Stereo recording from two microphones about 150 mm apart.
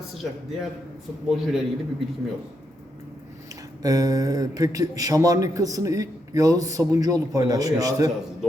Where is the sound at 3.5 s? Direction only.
25° right (ahead or behind).